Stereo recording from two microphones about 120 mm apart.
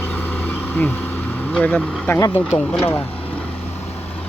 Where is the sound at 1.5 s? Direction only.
10° left (ahead or behind).